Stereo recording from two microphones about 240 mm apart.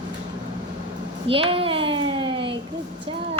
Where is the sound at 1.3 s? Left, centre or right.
Right.